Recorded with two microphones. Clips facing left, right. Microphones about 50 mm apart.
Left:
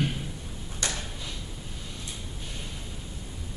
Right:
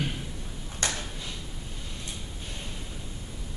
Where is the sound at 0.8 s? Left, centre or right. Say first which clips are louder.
Right 1 dB; right.